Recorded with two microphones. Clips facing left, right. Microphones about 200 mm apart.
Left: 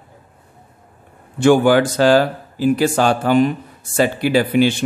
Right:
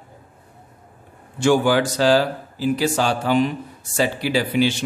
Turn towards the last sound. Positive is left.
turn(degrees=55)  # may be behind; listen again after turning